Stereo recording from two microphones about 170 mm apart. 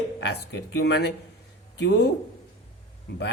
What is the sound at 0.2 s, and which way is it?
Speech, 80° left.